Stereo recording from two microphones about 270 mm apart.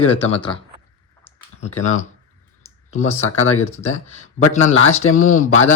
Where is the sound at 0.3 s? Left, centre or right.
Left.